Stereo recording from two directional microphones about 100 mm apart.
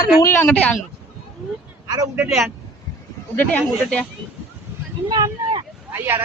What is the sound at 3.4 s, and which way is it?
Speech, 15° left (ahead or behind).